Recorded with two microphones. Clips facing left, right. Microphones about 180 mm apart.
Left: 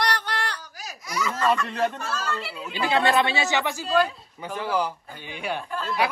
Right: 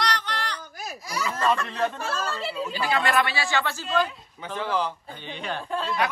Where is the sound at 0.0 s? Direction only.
60° left (ahead or behind).